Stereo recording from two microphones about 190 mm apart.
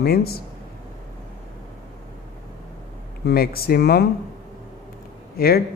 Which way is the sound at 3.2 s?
55° left (ahead or behind).